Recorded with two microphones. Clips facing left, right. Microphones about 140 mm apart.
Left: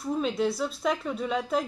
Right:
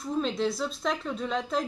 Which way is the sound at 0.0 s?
5° left (ahead or behind).